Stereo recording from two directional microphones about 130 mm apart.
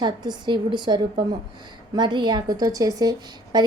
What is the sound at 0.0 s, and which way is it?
A woman's voice, 35° right (ahead or behind).